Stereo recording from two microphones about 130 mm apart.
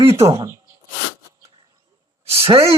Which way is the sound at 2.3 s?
45° right (ahead or behind).